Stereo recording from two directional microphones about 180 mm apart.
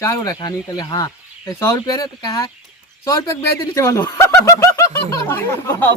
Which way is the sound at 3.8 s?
15° left (ahead or behind).